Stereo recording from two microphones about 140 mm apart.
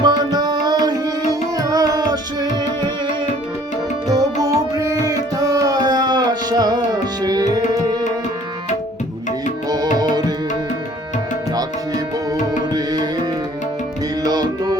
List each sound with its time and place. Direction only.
0.0 s music: 30° right (ahead or behind)
4.1 s tabla: 25° right (ahead or behind)
9.6 s music: 30° right (ahead or behind)
12.5 s tabla: 30° right (ahead or behind)
14.3 s music: 30° right (ahead or behind)